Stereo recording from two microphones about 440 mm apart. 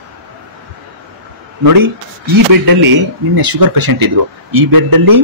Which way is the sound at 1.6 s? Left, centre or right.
Right.